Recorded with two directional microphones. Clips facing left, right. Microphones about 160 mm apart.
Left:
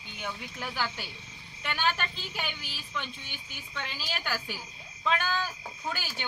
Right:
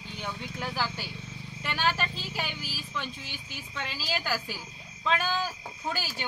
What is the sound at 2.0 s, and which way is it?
Speech, 35° right (ahead or behind).